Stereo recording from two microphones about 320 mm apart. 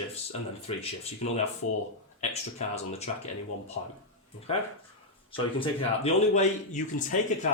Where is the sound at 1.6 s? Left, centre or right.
Left.